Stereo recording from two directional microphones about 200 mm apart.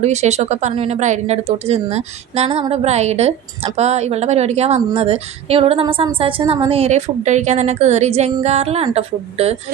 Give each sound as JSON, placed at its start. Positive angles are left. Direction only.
{"t": 0.0, "sound": "a woman's voice", "side_deg": -35}